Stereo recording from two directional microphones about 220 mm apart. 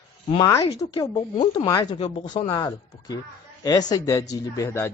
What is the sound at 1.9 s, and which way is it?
Speech, 30° left (ahead or behind).